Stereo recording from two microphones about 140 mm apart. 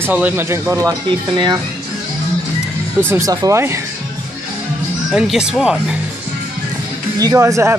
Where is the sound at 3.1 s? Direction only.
25° right (ahead or behind).